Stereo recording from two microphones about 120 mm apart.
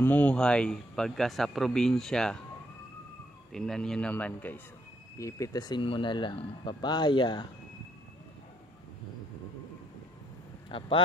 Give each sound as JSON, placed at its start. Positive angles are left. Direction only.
{"t": 0.0, "sound": "speech", "side_deg": 15}
{"t": 3.5, "sound": "speech", "side_deg": 5}
{"t": 5.1, "sound": "speech", "side_deg": 25}
{"t": 10.7, "sound": "speech", "side_deg": 45}